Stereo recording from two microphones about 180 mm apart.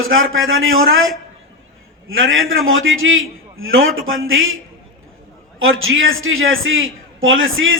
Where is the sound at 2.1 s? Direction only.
90° right.